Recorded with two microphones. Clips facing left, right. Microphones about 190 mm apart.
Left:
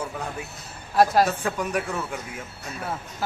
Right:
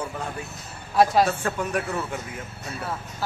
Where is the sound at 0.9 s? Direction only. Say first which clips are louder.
Even; centre (ahead or behind).